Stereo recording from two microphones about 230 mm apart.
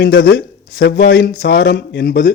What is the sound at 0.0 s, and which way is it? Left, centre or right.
A man's voice, left.